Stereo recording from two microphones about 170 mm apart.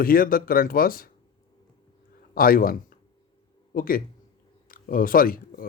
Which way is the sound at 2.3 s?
60° left (ahead or behind).